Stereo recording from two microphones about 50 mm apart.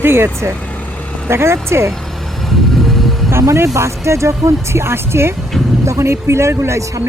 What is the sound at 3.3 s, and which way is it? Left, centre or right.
Speech, right.